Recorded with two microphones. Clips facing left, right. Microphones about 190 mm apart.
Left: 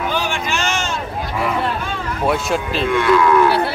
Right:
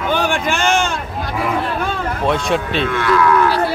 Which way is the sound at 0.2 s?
55° right (ahead or behind).